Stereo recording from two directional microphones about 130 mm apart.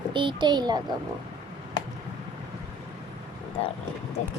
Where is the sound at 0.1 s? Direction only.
40° right (ahead or behind).